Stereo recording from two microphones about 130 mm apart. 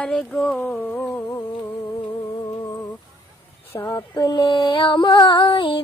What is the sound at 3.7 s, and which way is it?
Female singing, 15° left (ahead or behind).